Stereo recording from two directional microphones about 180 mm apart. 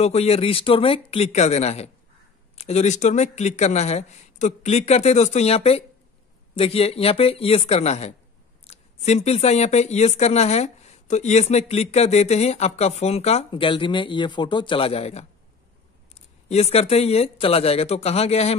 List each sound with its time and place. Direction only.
0.0 s speech: 35° left (ahead or behind)
16.4 s speech: 35° left (ahead or behind)